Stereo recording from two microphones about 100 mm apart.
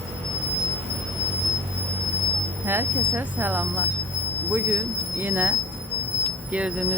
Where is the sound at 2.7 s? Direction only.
20° right (ahead or behind).